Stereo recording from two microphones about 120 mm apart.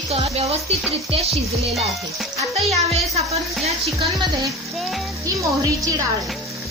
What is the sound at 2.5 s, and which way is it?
A woman's voice, 60° right (ahead or behind).